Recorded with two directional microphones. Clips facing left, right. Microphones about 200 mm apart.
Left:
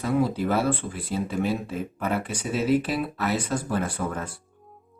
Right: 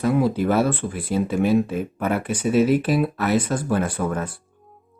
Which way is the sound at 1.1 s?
60° right (ahead or behind).